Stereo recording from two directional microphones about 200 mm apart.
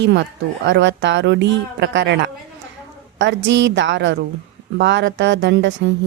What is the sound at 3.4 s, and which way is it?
A woman's voice, 65° right (ahead or behind).